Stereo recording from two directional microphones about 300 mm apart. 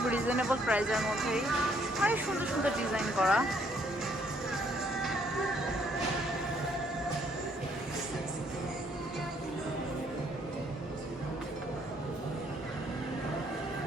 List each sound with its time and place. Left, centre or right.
0.0 s speech: centre
5.0 s music: centre